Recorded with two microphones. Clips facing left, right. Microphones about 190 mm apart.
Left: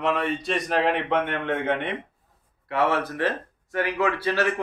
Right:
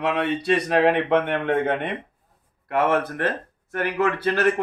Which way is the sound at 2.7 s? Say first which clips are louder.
Right 2 dB; 50° right (ahead or behind).